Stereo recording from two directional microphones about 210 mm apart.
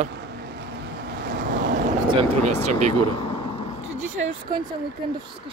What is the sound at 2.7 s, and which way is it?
Speech, 35° right (ahead or behind).